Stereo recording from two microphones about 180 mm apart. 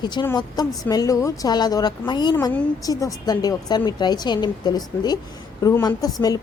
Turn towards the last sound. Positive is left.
turn(degrees=20)  # may be behind; listen again after turning